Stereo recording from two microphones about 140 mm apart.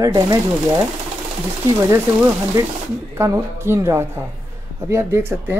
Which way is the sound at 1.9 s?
20° right (ahead or behind).